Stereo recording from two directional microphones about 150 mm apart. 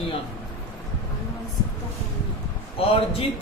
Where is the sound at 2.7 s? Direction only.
40° left (ahead or behind).